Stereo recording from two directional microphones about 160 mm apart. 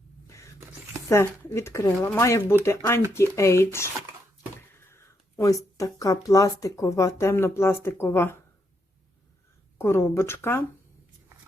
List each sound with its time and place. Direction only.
1.0 s speech: 15° left (ahead or behind)
9.7 s speech: 15° left (ahead or behind)